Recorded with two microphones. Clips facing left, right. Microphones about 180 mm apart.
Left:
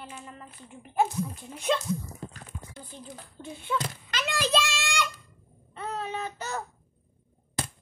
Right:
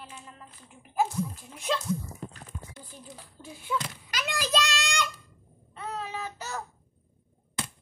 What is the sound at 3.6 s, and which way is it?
Speech, 5° right (ahead or behind).